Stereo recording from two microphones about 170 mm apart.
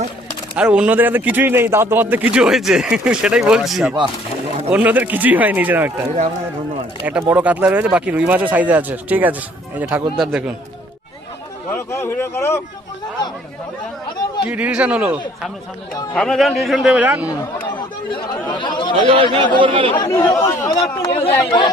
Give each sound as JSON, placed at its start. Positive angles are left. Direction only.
{"t": 0.5, "sound": "a man's voice", "side_deg": -5}
{"t": 7.0, "sound": "a man's voice", "side_deg": -10}
{"t": 11.7, "sound": "speech", "side_deg": 15}
{"t": 14.4, "sound": "a man's voice", "side_deg": -5}
{"t": 16.1, "sound": "a man's voice", "side_deg": 0}
{"t": 18.1, "sound": "speech", "side_deg": 30}
{"t": 19.0, "sound": "a man's voice", "side_deg": -30}
{"t": 20.1, "sound": "speech", "side_deg": 20}
{"t": 20.7, "sound": "speech", "side_deg": 30}